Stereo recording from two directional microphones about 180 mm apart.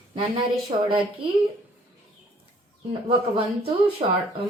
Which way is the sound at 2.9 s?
25° right (ahead or behind).